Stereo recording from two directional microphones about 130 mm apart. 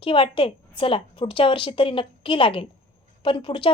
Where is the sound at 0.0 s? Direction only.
40° left (ahead or behind).